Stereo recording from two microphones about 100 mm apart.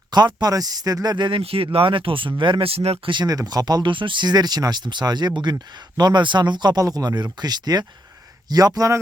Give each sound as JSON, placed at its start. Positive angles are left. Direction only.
{"t": 0.1, "sound": "speech", "side_deg": -45}
{"t": 1.4, "sound": "speech", "side_deg": -70}
{"t": 3.1, "sound": "speech", "side_deg": -45}